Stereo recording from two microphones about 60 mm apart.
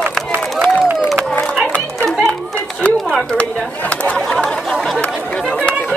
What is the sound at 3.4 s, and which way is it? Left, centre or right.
Chatter, left.